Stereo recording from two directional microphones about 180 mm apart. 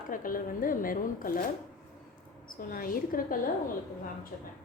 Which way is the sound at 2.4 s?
50° left (ahead or behind).